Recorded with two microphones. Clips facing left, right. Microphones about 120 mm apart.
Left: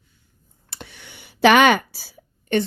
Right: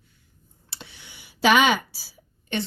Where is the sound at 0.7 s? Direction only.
50° left (ahead or behind).